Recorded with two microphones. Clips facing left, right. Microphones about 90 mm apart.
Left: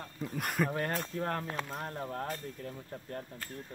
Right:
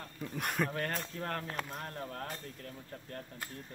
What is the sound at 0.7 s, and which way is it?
Speech, 15° left (ahead or behind).